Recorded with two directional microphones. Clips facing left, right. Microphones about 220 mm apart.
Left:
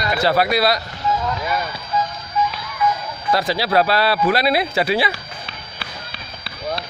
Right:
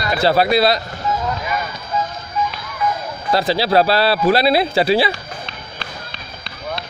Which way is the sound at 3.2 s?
30° right (ahead or behind).